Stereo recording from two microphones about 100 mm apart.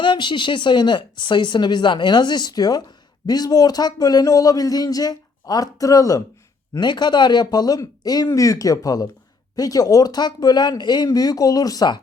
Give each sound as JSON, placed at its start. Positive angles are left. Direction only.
{"t": 0.0, "sound": "speech", "side_deg": 50}
{"t": 6.7, "sound": "speech", "side_deg": 50}